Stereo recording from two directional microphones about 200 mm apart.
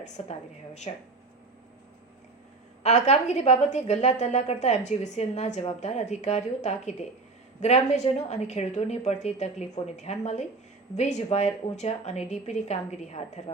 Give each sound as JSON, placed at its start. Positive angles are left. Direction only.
{"t": 0.0, "sound": "a woman's voice", "side_deg": 35}
{"t": 2.8, "sound": "a woman's voice", "side_deg": 35}